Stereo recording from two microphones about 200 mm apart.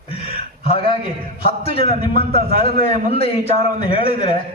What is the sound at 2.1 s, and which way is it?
Speech, 50° right (ahead or behind).